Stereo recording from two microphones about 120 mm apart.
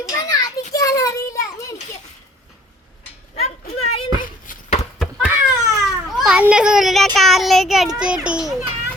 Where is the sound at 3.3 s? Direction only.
60° left (ahead or behind).